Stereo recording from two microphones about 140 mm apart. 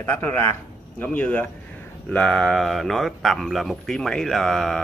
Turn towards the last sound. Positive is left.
turn(degrees=5)  # may be behind; listen again after turning